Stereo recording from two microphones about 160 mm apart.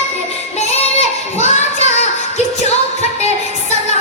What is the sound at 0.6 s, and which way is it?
Child singing, 45° left (ahead or behind).